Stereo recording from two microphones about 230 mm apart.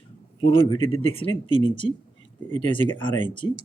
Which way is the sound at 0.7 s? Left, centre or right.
Left.